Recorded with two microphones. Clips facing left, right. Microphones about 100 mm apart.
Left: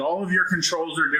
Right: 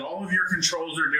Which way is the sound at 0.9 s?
25° left (ahead or behind).